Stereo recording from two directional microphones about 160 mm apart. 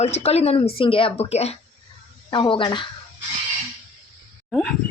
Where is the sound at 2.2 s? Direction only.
30° left (ahead or behind).